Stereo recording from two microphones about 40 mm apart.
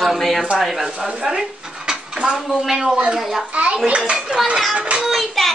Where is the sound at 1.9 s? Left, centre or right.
Right.